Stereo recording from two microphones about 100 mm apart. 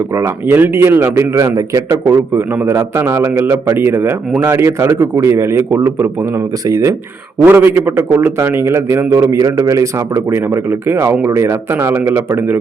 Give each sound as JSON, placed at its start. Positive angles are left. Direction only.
{"t": 0.1, "sound": "a man's voice", "side_deg": -25}
{"t": 7.3, "sound": "a man's voice", "side_deg": -20}